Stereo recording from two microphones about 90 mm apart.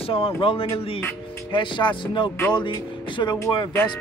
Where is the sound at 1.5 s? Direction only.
60° left (ahead or behind).